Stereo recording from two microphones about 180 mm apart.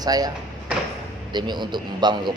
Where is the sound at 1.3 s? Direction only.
25° right (ahead or behind).